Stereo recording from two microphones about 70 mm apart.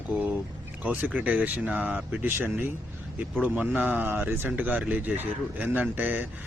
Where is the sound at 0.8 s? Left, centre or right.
Centre.